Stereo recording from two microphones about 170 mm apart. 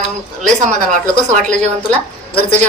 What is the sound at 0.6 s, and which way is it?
Speech, 45° right (ahead or behind).